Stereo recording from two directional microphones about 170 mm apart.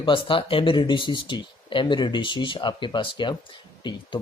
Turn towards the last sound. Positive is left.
turn(degrees=25)  # may be behind; listen again after turning